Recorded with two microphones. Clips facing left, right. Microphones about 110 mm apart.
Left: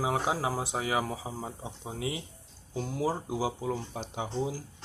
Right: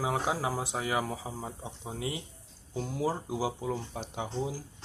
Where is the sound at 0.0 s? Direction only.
20° left (ahead or behind).